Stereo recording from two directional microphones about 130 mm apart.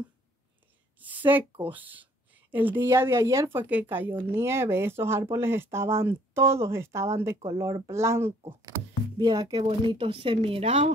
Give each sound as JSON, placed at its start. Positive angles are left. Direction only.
{"t": 0.9, "sound": "a sound", "side_deg": -15}
{"t": 1.6, "sound": "speech", "side_deg": -15}
{"t": 9.6, "sound": "speech", "side_deg": -40}